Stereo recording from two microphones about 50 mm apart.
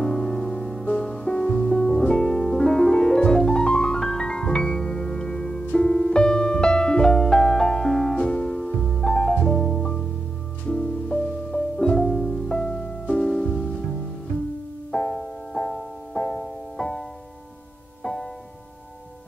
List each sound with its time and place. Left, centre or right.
0.0 s music: centre
14.9 s music: centre
18.0 s music: centre